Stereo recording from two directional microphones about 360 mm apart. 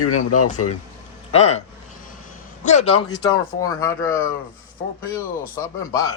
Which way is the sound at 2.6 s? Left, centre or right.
Centre.